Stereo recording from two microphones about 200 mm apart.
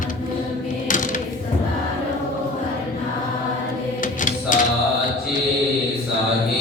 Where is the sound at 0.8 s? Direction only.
40° left (ahead or behind).